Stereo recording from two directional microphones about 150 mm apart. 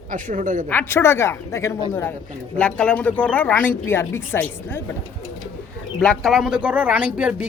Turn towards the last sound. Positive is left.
turn(degrees=-10)  # may be behind; listen again after turning